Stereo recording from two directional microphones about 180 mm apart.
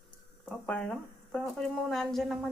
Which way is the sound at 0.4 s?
5° left (ahead or behind).